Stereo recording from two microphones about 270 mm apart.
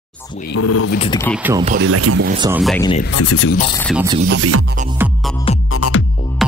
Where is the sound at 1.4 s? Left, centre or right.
Centre.